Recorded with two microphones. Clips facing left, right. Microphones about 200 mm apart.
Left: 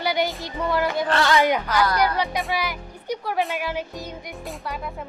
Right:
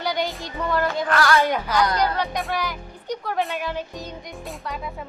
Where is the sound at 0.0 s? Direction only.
10° left (ahead or behind).